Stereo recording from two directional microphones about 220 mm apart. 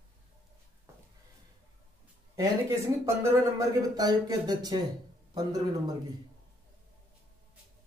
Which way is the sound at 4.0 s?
15° right (ahead or behind).